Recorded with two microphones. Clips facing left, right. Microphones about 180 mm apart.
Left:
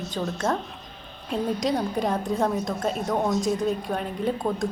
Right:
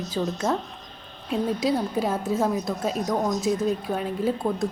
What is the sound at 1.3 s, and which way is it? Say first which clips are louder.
A woman's voice: right 1 dB; 5° right (ahead or behind).